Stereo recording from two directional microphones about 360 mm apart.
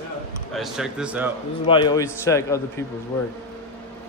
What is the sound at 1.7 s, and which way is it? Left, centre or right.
Speech, centre.